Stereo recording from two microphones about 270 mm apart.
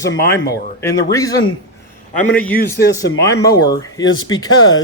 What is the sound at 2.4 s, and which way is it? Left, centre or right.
Speech, left.